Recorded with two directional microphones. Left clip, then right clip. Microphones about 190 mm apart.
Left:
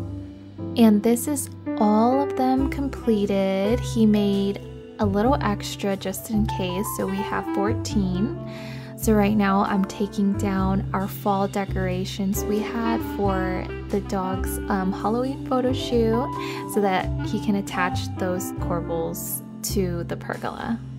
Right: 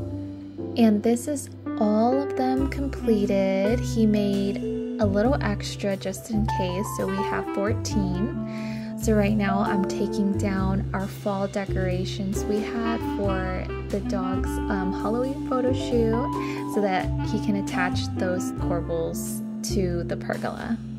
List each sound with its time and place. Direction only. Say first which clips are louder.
0.7 s a woman's voice: left 3 dB; 20° left (ahead or behind)
2.0 s music: left 1 dB; 20° left (ahead or behind)
12.4 s speech: even; 20° left (ahead or behind)
14.7 s speech: left 4 dB; 20° left (ahead or behind)
19.7 s music: even; 20° left (ahead or behind)